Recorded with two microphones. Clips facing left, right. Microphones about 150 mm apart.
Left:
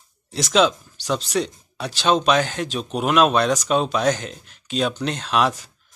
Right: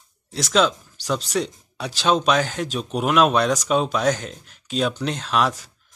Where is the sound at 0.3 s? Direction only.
Centre (ahead or behind).